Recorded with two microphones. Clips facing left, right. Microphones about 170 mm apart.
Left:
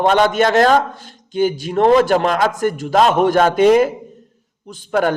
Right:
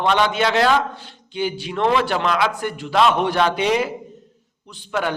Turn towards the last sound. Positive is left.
turn(degrees=45)  # may be behind; listen again after turning